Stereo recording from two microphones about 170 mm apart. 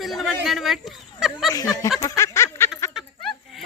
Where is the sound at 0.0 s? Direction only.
Centre (ahead or behind).